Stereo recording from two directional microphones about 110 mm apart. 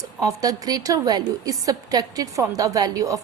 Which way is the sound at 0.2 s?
35° right (ahead or behind).